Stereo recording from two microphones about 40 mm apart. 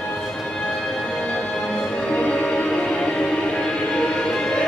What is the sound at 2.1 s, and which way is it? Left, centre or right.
Music, left.